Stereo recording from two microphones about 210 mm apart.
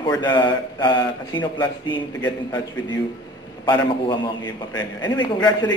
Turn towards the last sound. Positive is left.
turn(degrees=20)  # may be behind; listen again after turning